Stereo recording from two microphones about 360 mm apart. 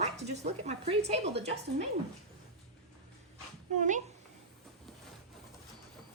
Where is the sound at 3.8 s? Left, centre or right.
Right.